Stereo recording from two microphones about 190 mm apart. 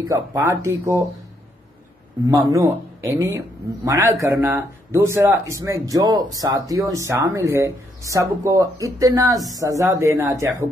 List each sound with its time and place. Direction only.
0.0 s a man's voice: 15° right (ahead or behind)
2.2 s a man's voice: 15° right (ahead or behind)